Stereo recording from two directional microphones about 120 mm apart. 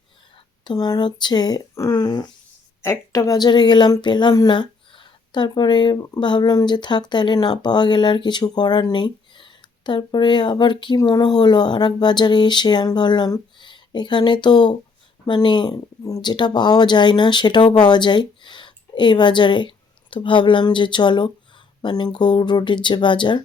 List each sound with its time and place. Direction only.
0.6 s speech: 35° left (ahead or behind)